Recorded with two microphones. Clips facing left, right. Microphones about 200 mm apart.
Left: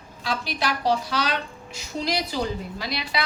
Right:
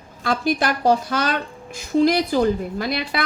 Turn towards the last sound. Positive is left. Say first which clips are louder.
# right 5 dB
turn(degrees=-50)  # may be behind; listen again after turning